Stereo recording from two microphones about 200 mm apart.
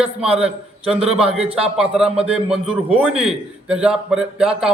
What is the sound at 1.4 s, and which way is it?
Speech, 30° right (ahead or behind).